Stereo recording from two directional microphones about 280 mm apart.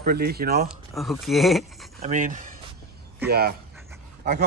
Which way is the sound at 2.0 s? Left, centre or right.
Right.